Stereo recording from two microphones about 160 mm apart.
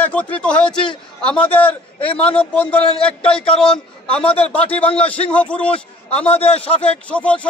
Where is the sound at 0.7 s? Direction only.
30° left (ahead or behind).